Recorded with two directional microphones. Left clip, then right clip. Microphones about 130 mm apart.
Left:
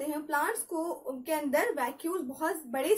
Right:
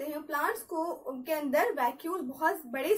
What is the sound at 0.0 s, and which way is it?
A woman's voice, 25° left (ahead or behind).